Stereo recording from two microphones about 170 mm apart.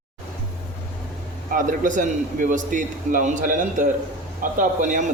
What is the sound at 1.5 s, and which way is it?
A man's voice, 50° right (ahead or behind).